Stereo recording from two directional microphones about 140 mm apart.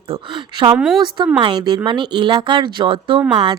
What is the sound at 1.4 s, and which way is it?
Speech, 35° right (ahead or behind).